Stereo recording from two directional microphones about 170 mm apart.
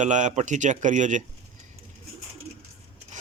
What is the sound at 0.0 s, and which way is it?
Speech, 45° right (ahead or behind).